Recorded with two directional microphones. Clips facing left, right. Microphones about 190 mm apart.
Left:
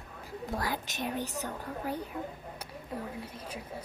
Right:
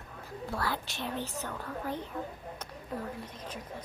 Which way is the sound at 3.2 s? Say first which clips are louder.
Even; 10° left (ahead or behind).